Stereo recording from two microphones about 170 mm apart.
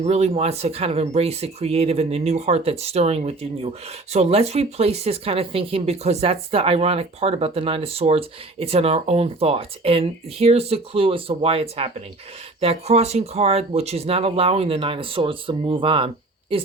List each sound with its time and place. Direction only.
0.0 s speech: 40° right (ahead or behind)